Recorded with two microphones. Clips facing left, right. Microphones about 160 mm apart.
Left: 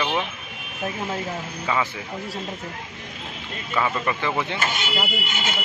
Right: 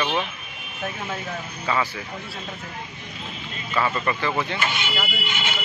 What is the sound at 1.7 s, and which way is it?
Speech, 15° left (ahead or behind).